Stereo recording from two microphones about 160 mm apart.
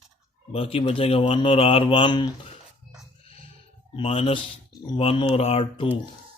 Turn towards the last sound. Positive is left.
turn(degrees=35)  # may be behind; listen again after turning